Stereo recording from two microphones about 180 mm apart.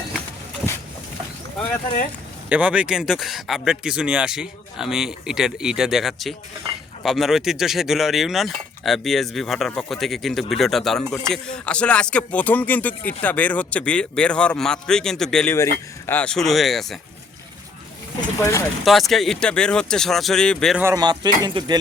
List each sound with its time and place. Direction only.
2.5 s speech: 10° right (ahead or behind)
18.3 s speech: 15° left (ahead or behind)
18.9 s speech: centre (ahead or behind)
20.8 s speech: 20° right (ahead or behind)